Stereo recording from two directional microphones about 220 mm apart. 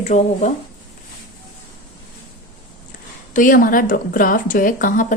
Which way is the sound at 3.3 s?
35° left (ahead or behind).